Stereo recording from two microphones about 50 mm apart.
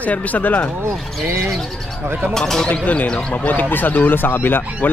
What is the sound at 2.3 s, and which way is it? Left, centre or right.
Speech, centre.